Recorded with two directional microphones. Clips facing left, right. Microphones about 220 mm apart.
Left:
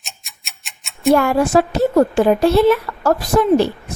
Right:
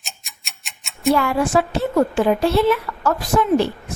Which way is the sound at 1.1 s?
45° left (ahead or behind).